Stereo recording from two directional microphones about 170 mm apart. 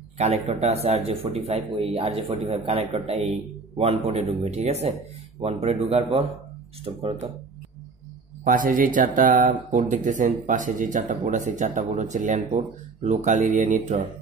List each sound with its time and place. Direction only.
0.2 s a man's voice: 40° right (ahead or behind)
8.5 s speech: 55° right (ahead or behind)